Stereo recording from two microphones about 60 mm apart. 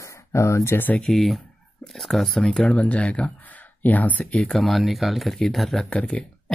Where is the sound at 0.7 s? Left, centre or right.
Left.